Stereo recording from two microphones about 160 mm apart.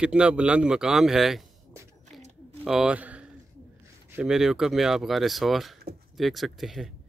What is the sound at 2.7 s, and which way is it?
Speech, 5° right (ahead or behind).